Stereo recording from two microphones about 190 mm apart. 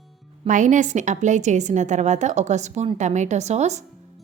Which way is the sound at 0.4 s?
40° right (ahead or behind).